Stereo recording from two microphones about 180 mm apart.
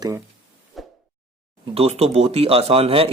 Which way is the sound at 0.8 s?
Centre (ahead or behind).